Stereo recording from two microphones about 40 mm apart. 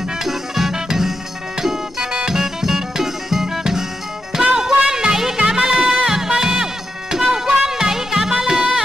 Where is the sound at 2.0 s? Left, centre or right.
Right.